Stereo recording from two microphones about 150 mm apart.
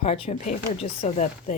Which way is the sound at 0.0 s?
40° left (ahead or behind).